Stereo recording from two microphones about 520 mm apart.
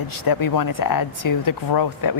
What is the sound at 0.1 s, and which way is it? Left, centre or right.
A woman's voice, left.